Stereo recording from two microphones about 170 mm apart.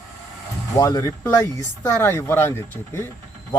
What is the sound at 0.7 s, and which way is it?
Speech, 20° left (ahead or behind).